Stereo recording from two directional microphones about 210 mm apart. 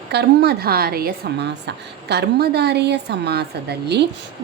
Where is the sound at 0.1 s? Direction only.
50° right (ahead or behind).